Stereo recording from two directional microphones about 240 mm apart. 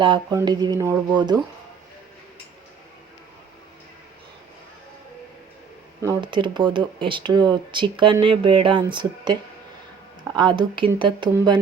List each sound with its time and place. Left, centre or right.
0.0 s speech: centre
6.0 s speech: centre